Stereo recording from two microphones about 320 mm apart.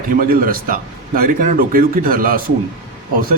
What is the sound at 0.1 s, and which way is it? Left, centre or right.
A man's voice, right.